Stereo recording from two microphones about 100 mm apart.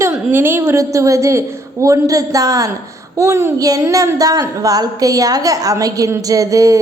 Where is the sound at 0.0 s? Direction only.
20° right (ahead or behind).